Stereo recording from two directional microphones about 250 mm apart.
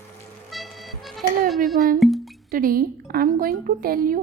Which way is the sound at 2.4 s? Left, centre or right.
Right.